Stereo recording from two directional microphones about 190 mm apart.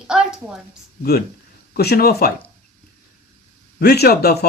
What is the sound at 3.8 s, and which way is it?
Speech, 55° left (ahead or behind).